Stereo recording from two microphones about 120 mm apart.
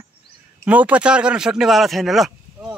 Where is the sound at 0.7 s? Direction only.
10° right (ahead or behind).